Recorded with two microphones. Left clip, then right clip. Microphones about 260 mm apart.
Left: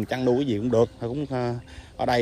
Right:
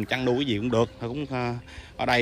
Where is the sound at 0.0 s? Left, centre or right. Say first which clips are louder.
Left 2 dB; centre.